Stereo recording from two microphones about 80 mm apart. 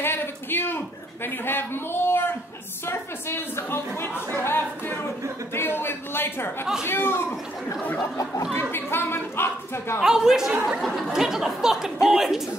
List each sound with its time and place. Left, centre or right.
0.0 s a man's voice: left
8.5 s speech: left
10.0 s a sound: centre